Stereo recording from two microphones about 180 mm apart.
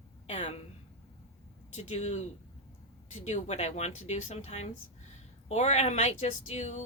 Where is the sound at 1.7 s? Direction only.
40° left (ahead or behind).